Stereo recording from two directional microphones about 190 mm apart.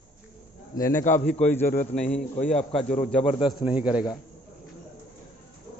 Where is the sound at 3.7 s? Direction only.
5° right (ahead or behind).